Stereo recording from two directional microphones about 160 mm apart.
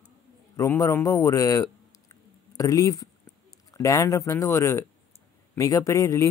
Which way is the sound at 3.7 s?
20° left (ahead or behind).